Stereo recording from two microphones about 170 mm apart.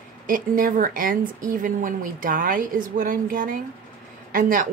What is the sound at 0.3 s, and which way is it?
A woman's voice, 55° right (ahead or behind).